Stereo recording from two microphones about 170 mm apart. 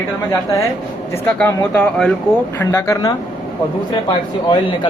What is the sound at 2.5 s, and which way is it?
Speech, 15° left (ahead or behind).